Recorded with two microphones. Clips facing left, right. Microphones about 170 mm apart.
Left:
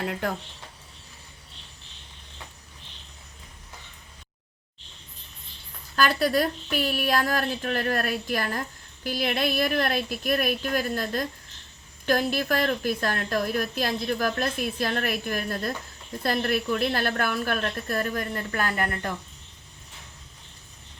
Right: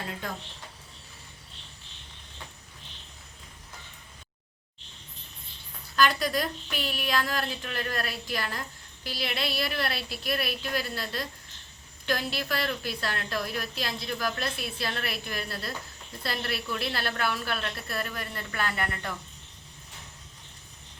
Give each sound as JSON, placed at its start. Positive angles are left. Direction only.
{"t": 0.0, "sound": "speech", "side_deg": 65}
{"t": 6.0, "sound": "a woman's voice", "side_deg": 45}